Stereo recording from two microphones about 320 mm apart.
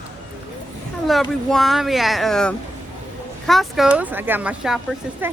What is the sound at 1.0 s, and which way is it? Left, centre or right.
Speech, centre.